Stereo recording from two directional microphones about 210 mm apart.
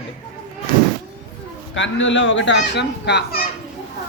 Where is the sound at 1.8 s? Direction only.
60° left (ahead or behind).